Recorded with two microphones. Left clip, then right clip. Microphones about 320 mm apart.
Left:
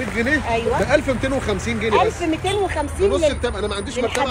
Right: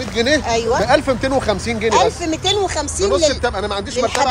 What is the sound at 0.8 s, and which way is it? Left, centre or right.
Speech, right.